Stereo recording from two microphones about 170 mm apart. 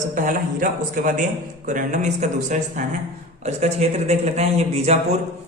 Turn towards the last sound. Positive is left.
turn(degrees=-40)  # may be behind; listen again after turning